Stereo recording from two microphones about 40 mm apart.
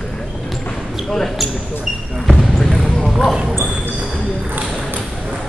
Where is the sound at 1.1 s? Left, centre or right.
Centre.